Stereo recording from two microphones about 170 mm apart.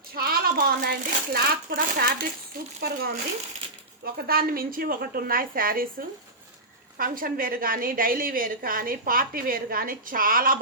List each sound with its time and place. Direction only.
0.1 s a woman's voice: 60° right (ahead or behind)
4.0 s a woman's voice: 60° right (ahead or behind)